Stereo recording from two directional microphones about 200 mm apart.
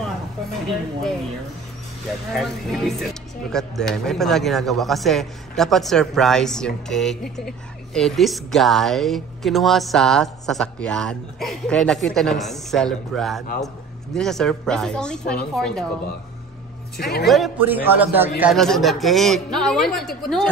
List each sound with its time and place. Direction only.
2.3 s a woman's voice: centre (ahead or behind)
16.9 s a woman's voice: 55° left (ahead or behind)
17.3 s a man's voice: 5° right (ahead or behind)